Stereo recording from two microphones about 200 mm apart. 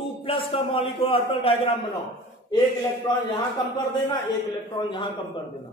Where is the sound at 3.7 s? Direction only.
20° left (ahead or behind).